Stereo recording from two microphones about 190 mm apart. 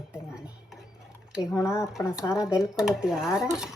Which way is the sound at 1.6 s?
15° left (ahead or behind).